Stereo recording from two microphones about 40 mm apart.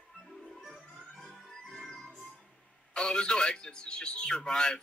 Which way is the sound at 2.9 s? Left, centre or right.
Left.